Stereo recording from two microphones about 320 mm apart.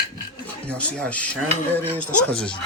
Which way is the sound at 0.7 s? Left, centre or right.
Centre.